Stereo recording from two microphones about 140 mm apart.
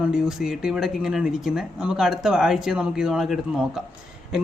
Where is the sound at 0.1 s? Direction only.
5° right (ahead or behind).